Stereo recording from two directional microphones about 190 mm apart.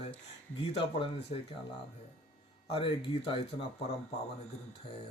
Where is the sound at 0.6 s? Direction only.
30° left (ahead or behind).